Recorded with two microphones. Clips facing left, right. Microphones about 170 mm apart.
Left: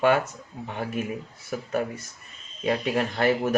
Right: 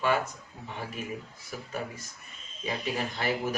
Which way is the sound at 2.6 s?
60° left (ahead or behind).